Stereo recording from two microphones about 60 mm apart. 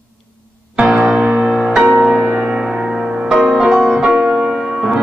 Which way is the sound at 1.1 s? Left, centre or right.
Right.